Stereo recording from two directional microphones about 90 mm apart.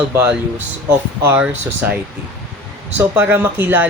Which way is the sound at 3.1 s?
20° right (ahead or behind).